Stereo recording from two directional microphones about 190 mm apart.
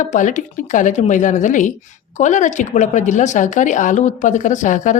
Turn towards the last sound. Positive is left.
turn(degrees=40)  # may be behind; listen again after turning